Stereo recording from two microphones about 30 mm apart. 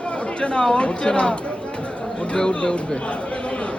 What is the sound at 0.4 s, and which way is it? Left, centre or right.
Speech, left.